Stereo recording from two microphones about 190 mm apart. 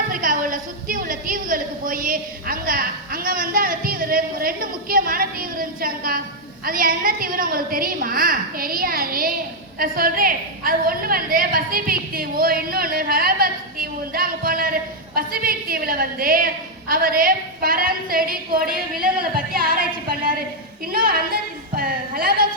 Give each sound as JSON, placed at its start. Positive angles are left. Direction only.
{"t": 0.1, "sound": "a woman's voice", "side_deg": -45}